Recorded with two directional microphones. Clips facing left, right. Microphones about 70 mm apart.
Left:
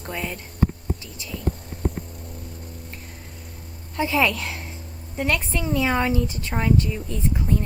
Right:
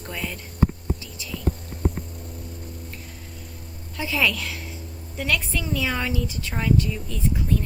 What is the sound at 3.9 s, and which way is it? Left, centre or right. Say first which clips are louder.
A woman's voice: left 3 dB; left.